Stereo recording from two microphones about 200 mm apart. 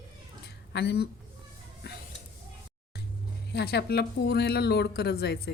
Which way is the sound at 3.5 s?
55° left (ahead or behind).